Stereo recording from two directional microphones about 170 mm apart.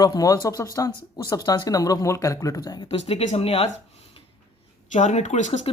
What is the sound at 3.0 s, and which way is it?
Speech, 35° left (ahead or behind).